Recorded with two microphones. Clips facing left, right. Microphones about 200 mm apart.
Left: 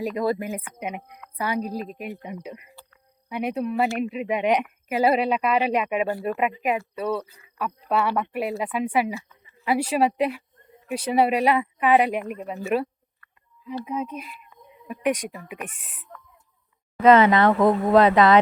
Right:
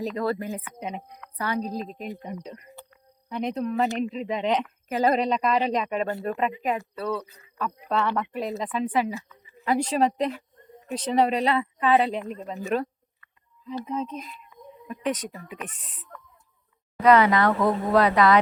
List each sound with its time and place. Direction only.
0.0 s a woman's voice: 10° left (ahead or behind)
13.8 s speech: 10° left (ahead or behind)
17.0 s speech: 25° left (ahead or behind)